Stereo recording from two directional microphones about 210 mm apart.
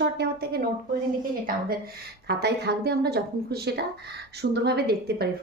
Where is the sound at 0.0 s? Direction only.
50° right (ahead or behind).